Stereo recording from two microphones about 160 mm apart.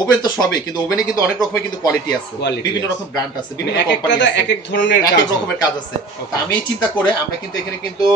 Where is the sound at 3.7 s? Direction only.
90° left.